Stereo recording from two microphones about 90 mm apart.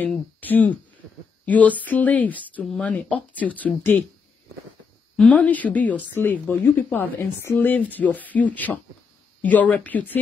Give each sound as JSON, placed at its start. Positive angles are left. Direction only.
{"t": 0.0, "sound": "speech", "side_deg": 20}
{"t": 5.1, "sound": "speech", "side_deg": 15}